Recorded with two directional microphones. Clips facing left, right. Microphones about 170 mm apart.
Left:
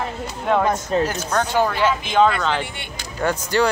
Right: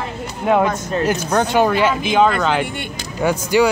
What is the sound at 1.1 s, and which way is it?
Speech, 15° right (ahead or behind).